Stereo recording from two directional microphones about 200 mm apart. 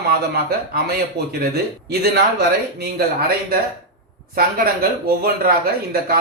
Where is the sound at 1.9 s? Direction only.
55° right (ahead or behind).